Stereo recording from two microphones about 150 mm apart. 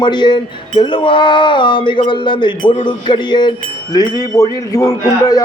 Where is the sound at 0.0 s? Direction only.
30° left (ahead or behind).